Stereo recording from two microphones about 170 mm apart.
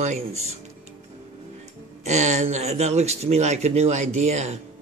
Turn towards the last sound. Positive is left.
turn(degrees=-40)  # may be behind; listen again after turning